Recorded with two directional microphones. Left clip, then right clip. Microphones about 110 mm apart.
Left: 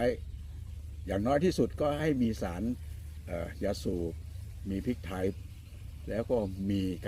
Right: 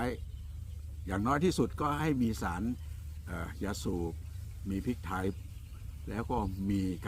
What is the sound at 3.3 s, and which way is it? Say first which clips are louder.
Speech: left 5 dB; 25° right (ahead or behind).